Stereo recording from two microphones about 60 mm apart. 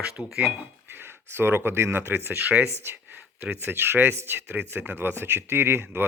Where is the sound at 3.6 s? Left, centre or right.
Right.